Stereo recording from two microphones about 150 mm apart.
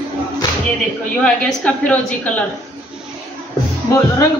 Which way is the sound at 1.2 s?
10° left (ahead or behind).